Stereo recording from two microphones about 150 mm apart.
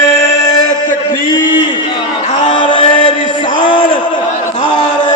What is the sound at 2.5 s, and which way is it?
Male singing, 35° left (ahead or behind).